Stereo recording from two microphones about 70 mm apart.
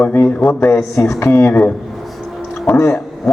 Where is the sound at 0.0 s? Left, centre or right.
Left.